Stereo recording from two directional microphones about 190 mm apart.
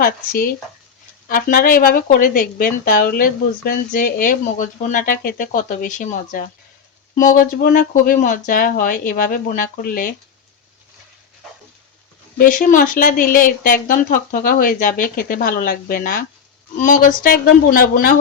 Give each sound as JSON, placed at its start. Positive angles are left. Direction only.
{"t": 0.0, "sound": "speech", "side_deg": 50}
{"t": 12.4, "sound": "speech", "side_deg": 45}